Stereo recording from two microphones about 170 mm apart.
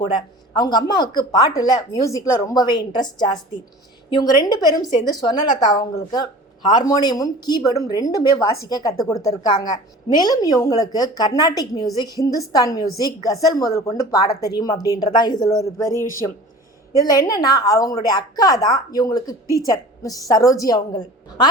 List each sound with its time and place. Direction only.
0.0 s a woman's voice: 25° left (ahead or behind)
17.1 s a woman's voice: 20° left (ahead or behind)